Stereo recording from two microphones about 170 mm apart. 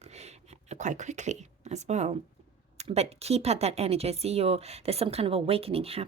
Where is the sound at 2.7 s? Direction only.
40° right (ahead or behind).